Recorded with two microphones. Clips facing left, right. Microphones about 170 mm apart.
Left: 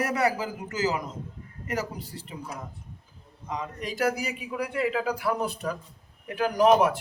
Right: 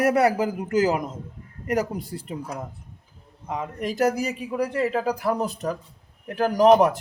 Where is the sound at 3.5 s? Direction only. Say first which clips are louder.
Right 5 dB; 50° right (ahead or behind).